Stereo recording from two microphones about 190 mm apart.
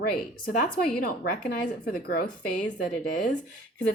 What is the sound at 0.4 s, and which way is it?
Speech, 50° left (ahead or behind).